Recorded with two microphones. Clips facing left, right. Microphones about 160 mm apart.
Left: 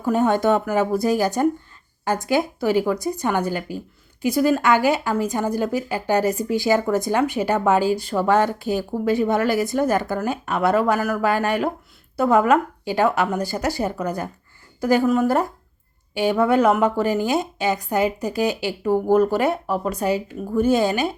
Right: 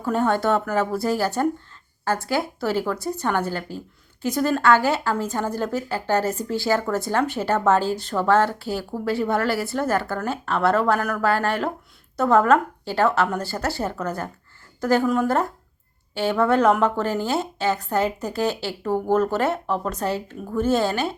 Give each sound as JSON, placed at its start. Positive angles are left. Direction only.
{"t": 0.0, "sound": "speech", "side_deg": 15}